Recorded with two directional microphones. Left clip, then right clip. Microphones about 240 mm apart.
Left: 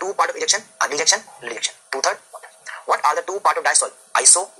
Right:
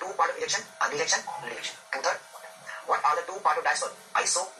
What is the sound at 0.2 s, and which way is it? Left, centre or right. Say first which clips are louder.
Speech: left 6 dB; left.